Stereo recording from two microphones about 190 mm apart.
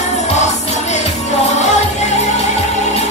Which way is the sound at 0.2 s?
35° left (ahead or behind).